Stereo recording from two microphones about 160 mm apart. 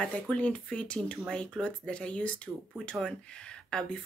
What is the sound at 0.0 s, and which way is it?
Speech, 10° left (ahead or behind).